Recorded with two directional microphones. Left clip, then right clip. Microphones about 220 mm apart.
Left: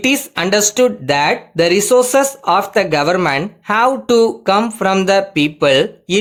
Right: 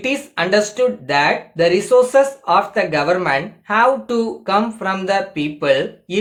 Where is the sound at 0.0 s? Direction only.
50° left (ahead or behind).